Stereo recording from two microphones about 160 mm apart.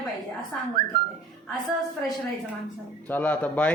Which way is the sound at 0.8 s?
60° right (ahead or behind).